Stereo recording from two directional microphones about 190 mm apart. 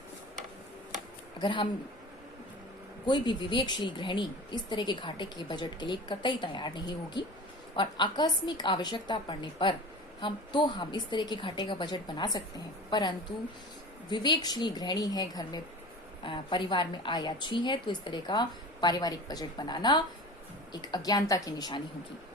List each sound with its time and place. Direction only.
1.4 s speech: 25° left (ahead or behind)
3.1 s speech: 25° left (ahead or behind)